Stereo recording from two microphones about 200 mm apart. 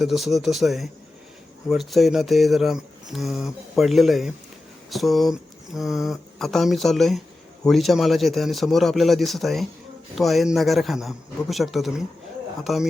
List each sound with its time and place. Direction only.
0.0 s speech: centre (ahead or behind)